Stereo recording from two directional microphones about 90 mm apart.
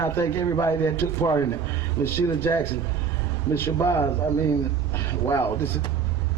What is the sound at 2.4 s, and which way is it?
Speech, 25° left (ahead or behind).